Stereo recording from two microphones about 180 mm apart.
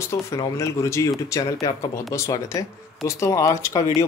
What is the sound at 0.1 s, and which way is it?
Speech, 15° left (ahead or behind).